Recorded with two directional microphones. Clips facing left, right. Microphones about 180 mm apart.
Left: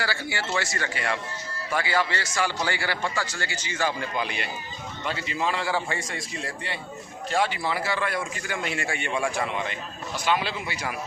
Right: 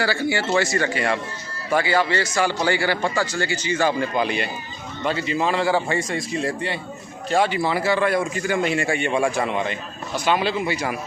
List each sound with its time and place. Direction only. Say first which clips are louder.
0.0 s a man's voice: right 8 dB; 25° right (ahead or behind)
0.9 s a man's voice: right 6 dB; 35° right (ahead or behind)